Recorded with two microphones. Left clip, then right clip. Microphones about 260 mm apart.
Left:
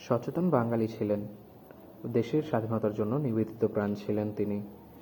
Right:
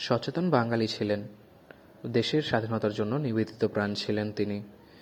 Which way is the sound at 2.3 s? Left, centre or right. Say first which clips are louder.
Right 2 dB; right.